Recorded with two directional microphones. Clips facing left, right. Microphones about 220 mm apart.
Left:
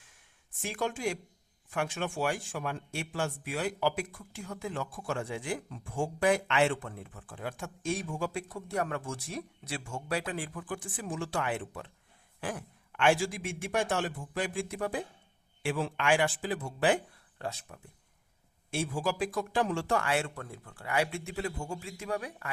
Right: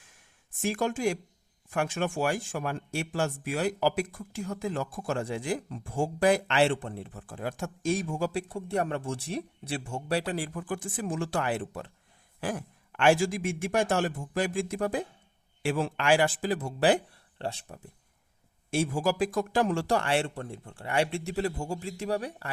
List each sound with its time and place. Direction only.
0.6 s a man's voice: 45° right (ahead or behind)
10.7 s a man's voice: 50° right (ahead or behind); by 17.7 s 30° right (ahead or behind)
18.7 s speech: 40° right (ahead or behind)